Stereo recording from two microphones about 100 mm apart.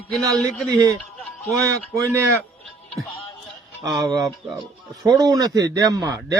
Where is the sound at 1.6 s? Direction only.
30° right (ahead or behind).